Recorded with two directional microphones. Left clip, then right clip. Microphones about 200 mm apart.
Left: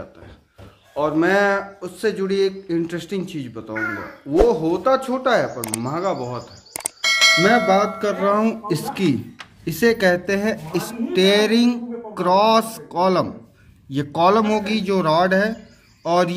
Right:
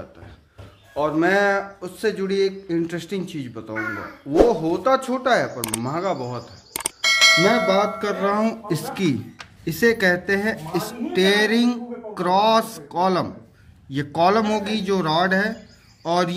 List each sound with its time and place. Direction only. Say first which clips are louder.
0.9 s speech: left 1 dB; 5° left (ahead or behind)